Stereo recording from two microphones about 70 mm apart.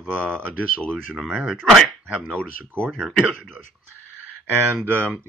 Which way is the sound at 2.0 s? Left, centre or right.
Centre.